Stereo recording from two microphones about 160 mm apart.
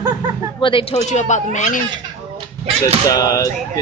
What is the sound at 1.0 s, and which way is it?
Speech, 50° left (ahead or behind).